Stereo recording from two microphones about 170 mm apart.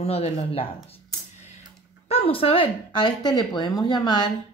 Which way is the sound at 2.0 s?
35° left (ahead or behind).